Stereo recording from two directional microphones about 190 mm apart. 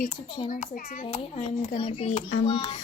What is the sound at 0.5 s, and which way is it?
Speech, 45° left (ahead or behind).